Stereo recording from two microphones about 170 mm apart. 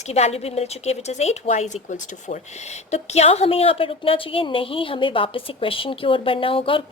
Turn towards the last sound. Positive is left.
turn(degrees=30)  # may be behind; listen again after turning